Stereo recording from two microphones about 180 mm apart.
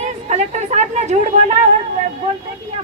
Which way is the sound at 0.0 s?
40° right (ahead or behind).